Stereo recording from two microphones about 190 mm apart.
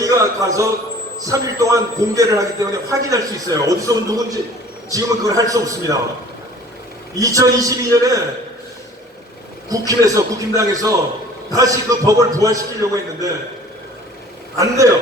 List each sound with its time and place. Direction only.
0.0 s a man's voice: 15° right (ahead or behind)
7.2 s a man's voice: 15° right (ahead or behind)
9.6 s a man's voice: 20° right (ahead or behind)